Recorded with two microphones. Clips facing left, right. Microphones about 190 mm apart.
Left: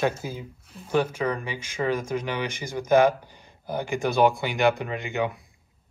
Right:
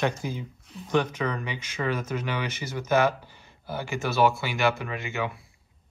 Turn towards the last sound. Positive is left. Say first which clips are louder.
# left 4 dB
turn(degrees=15)  # may be behind; listen again after turning